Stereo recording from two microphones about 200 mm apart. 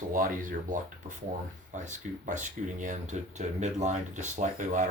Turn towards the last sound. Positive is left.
turn(degrees=-35)  # may be behind; listen again after turning